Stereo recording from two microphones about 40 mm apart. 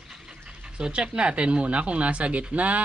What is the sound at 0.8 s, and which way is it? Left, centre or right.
Speech, right.